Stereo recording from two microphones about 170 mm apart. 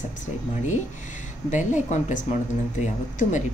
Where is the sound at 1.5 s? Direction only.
45° left (ahead or behind).